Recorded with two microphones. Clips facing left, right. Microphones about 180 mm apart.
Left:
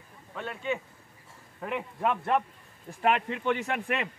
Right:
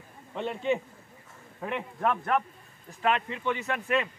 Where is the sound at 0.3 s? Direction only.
25° right (ahead or behind).